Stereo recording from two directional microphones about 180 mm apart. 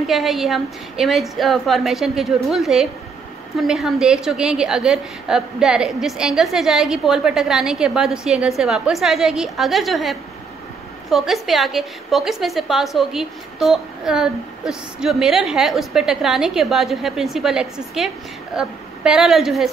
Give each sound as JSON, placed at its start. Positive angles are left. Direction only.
{"t": 0.0, "sound": "a woman's voice", "side_deg": 0}